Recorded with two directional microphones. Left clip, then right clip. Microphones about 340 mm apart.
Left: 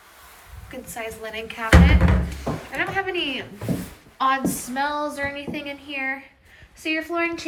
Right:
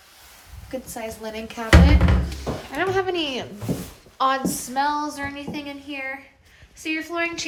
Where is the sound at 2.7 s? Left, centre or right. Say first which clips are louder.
Right 2 dB; centre.